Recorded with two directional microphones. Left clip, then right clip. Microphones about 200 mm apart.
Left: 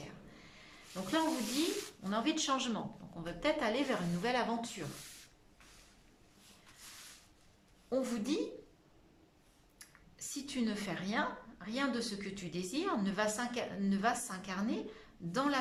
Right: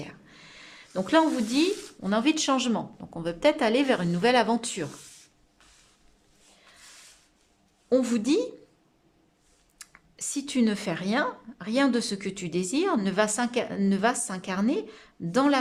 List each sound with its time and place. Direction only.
0.0 s a sound: 45° right (ahead or behind)
2.0 s speech: 45° right (ahead or behind)
7.9 s speech: 45° right (ahead or behind)
9.7 s speech: 45° right (ahead or behind)